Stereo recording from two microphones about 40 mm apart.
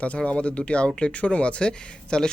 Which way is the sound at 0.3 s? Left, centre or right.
Left.